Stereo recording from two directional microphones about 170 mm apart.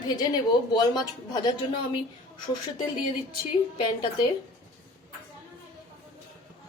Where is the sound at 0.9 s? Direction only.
25° left (ahead or behind).